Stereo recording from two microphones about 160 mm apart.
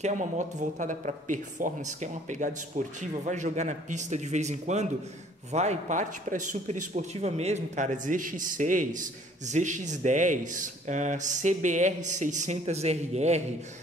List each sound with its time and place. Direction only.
0.0 s speech: 50° right (ahead or behind)